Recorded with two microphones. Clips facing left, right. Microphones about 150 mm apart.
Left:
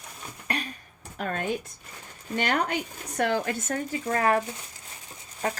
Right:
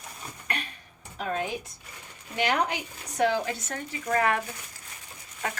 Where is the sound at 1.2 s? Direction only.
55° left (ahead or behind); by 4.4 s 35° left (ahead or behind).